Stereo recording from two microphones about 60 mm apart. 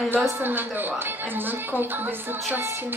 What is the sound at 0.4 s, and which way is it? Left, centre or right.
A woman's voice, right.